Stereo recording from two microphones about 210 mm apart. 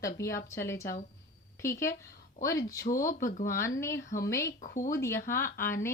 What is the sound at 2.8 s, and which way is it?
Speech, 40° left (ahead or behind).